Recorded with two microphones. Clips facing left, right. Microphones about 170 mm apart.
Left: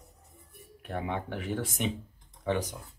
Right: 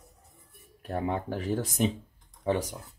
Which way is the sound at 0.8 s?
35° right (ahead or behind).